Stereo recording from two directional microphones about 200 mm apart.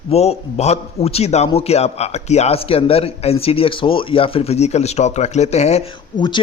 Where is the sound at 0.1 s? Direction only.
30° left (ahead or behind).